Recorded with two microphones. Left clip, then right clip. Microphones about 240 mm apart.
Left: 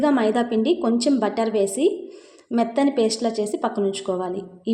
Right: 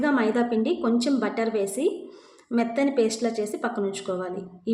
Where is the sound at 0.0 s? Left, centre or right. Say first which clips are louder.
Left 3 dB; centre.